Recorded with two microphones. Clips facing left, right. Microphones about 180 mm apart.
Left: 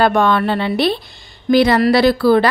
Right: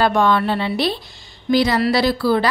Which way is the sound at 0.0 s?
60° left (ahead or behind).